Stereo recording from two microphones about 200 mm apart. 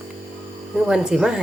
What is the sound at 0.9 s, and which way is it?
Speech, 5° right (ahead or behind).